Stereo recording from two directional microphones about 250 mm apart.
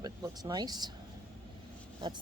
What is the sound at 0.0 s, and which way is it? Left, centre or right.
Speech, centre.